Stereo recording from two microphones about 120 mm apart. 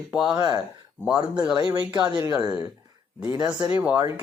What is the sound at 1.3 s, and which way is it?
Speech, 10° right (ahead or behind).